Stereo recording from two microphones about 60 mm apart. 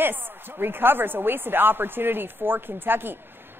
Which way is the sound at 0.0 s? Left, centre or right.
Right.